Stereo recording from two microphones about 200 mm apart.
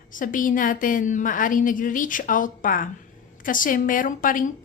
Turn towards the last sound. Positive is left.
turn(degrees=45)  # may be behind; listen again after turning